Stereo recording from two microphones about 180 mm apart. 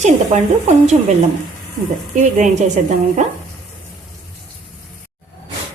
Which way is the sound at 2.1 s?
45° right (ahead or behind).